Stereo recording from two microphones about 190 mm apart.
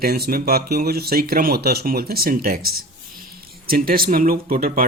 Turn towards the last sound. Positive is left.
turn(degrees=-50)  # may be behind; listen again after turning